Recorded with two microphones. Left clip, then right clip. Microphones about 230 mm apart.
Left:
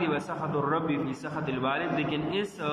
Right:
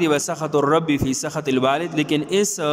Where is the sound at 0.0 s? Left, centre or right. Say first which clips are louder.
Right 9 dB; right.